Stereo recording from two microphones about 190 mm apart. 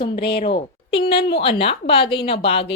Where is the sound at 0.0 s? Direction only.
25° left (ahead or behind).